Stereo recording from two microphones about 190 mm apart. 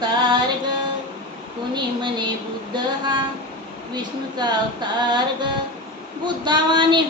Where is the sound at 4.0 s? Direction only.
20° right (ahead or behind).